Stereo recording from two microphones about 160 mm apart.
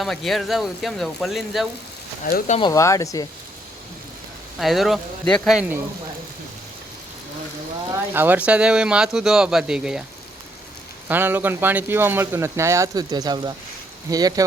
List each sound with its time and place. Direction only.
0.0 s speech: centre (ahead or behind)
2.3 s speech: 65° left (ahead or behind)
2.6 s speech: 25° left (ahead or behind)
4.6 s speech: centre (ahead or behind)
5.5 s speech: 10° right (ahead or behind)
8.1 s speech: 10° right (ahead or behind)
11.1 s speech: 15° right (ahead or behind)